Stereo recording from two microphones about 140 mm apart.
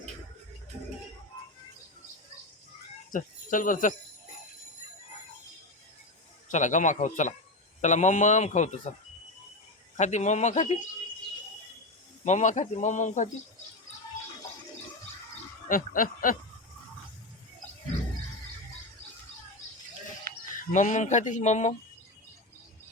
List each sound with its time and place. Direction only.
3.1 s speech: 70° left (ahead or behind)
6.5 s speech: 60° left (ahead or behind)
10.0 s speech: 55° left (ahead or behind)
12.2 s speech: 60° left (ahead or behind)
15.7 s snicker: 80° left
20.5 s speech: 70° left (ahead or behind)